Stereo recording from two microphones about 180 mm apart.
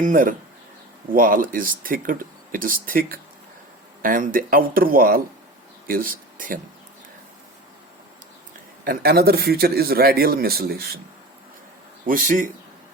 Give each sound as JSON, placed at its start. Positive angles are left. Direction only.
{"t": 0.0, "sound": "speech", "side_deg": -50}
{"t": 8.8, "sound": "speech", "side_deg": -55}
{"t": 12.0, "sound": "speech", "side_deg": -50}